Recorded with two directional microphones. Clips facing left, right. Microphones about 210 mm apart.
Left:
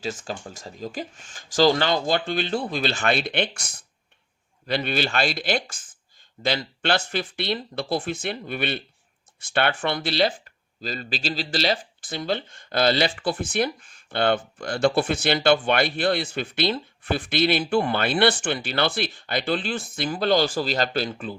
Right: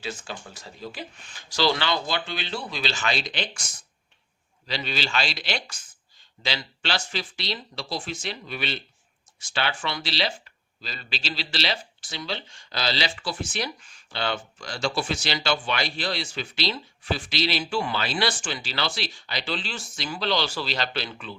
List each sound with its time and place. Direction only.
0.0 s speech: 45° left (ahead or behind)